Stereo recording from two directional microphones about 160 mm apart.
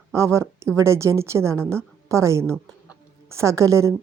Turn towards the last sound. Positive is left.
turn(degrees=-20)  # may be behind; listen again after turning